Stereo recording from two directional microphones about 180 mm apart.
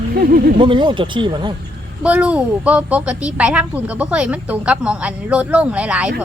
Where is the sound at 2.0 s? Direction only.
5° right (ahead or behind).